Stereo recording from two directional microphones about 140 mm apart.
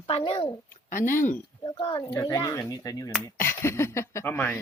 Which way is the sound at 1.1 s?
65° left (ahead or behind).